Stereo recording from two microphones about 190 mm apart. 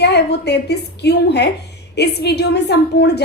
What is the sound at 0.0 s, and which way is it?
A woman's voice, 60° left (ahead or behind).